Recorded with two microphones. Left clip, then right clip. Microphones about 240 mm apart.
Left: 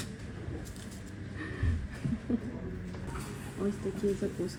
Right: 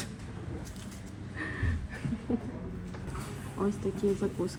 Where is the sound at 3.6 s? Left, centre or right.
Right.